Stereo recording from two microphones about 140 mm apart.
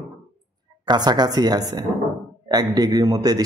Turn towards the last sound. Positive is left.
turn(degrees=-25)  # may be behind; listen again after turning